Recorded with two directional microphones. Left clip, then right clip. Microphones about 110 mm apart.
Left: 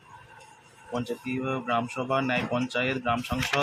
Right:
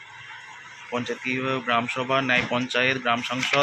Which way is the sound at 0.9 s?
5° right (ahead or behind).